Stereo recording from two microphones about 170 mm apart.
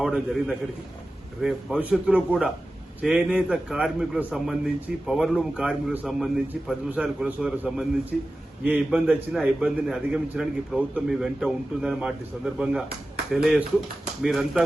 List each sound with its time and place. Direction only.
0.0 s a man's voice: centre (ahead or behind)